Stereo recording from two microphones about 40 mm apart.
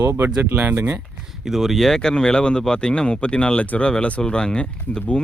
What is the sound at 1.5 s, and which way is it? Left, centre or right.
Speech, centre.